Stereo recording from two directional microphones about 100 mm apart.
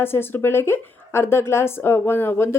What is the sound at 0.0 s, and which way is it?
Speech, 20° left (ahead or behind).